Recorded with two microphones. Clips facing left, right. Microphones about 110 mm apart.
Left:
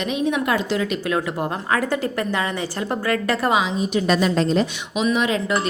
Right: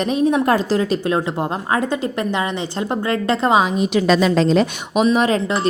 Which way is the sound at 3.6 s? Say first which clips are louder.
Right 4 dB; 70° right (ahead or behind).